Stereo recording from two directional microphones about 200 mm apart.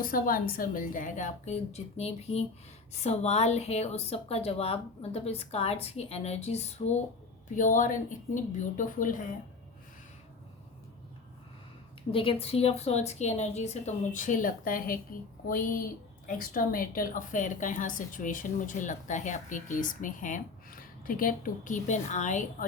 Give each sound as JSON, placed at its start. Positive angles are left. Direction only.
{"t": 0.0, "sound": "a woman's voice", "side_deg": 45}
{"t": 12.1, "sound": "a woman's voice", "side_deg": 25}